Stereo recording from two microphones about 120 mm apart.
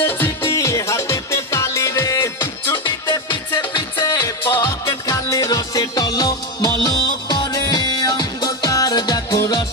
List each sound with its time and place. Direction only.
0.0 s music: 20° left (ahead or behind)
2.7 s music: 40° left (ahead or behind)